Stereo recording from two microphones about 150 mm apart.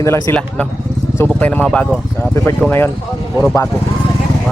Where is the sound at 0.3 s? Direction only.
5° left (ahead or behind).